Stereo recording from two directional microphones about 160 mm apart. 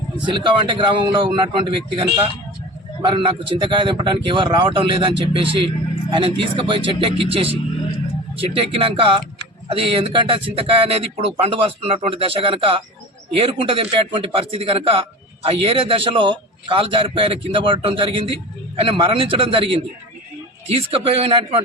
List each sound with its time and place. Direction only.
0.3 s a man's voice: 30° right (ahead or behind)